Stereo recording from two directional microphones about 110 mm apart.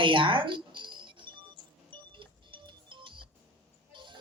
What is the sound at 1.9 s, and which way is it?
Music, 50° right (ahead or behind).